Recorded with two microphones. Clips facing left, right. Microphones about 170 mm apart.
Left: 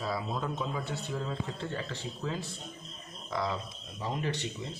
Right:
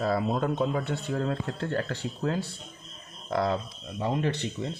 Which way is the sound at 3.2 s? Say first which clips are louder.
Right 6 dB; 55° right (ahead or behind).